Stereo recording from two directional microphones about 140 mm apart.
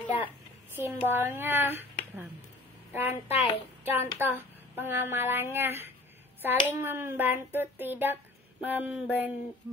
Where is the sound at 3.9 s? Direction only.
15° right (ahead or behind).